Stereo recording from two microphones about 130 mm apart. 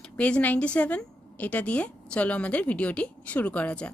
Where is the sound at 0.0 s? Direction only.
10° left (ahead or behind).